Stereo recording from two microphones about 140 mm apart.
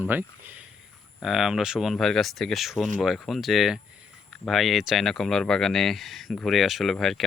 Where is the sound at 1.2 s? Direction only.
5° right (ahead or behind).